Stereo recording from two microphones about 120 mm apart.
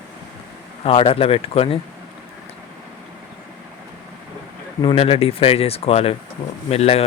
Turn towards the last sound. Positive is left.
turn(degrees=60)  # may be behind; listen again after turning